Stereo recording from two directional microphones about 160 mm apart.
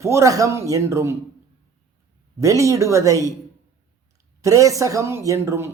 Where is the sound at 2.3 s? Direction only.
20° right (ahead or behind).